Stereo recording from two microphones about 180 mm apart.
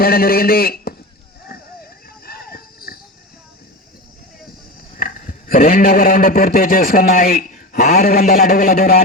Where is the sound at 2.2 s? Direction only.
55° left (ahead or behind).